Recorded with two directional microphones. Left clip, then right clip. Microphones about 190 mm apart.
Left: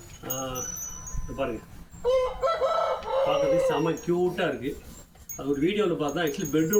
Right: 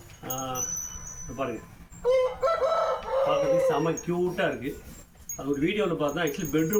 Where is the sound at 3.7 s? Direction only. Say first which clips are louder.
Left 1 dB; 5° left (ahead or behind).